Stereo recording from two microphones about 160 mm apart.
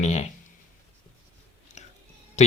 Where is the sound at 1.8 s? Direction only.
45° left (ahead or behind).